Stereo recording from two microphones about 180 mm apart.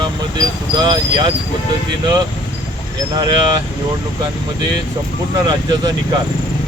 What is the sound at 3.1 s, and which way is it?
Speech, 25° right (ahead or behind).